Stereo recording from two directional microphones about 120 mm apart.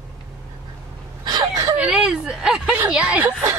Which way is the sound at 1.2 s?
30° right (ahead or behind).